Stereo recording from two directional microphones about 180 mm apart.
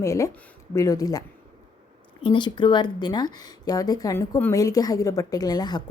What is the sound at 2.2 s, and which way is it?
A woman's voice, 25° left (ahead or behind).